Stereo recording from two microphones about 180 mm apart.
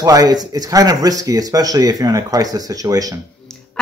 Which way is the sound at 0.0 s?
20° right (ahead or behind).